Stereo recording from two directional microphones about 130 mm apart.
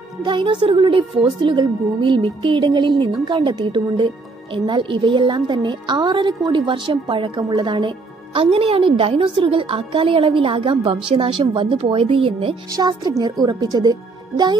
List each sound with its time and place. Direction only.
0.2 s a woman's voice: 35° right (ahead or behind)
12.6 s a woman's voice: 30° right (ahead or behind)